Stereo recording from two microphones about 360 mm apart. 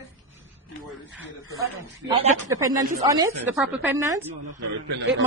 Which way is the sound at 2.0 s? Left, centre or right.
Centre.